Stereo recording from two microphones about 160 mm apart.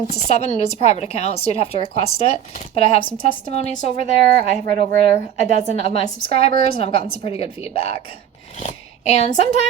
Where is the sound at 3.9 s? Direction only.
65° right (ahead or behind).